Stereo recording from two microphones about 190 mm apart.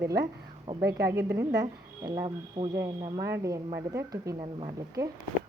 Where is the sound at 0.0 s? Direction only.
55° right (ahead or behind).